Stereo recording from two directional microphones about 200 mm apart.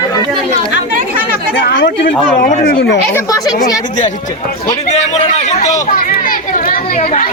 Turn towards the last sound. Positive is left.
turn(degrees=40)  # may be behind; listen again after turning